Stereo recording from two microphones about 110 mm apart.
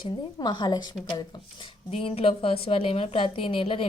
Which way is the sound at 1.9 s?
60° left (ahead or behind).